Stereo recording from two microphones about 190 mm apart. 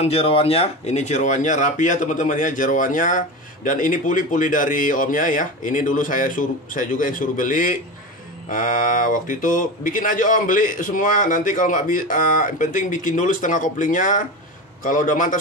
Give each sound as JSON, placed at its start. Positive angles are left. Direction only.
{"t": 0.0, "sound": "speech", "side_deg": 30}